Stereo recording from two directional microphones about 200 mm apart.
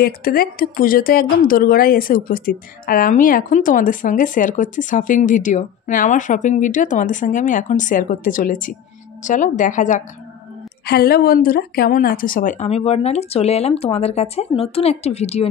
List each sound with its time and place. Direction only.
0.0 s speech: 45° left (ahead or behind)
10.9 s speech: 50° left (ahead or behind); by 15.4 s 30° left (ahead or behind)